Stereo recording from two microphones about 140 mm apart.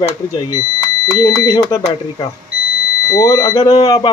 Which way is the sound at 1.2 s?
25° left (ahead or behind).